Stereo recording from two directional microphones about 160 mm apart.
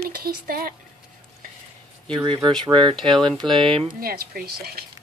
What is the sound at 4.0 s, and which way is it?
Speech, 65° right (ahead or behind).